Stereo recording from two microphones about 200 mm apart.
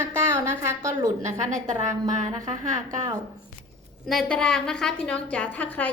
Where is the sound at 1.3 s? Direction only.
40° right (ahead or behind).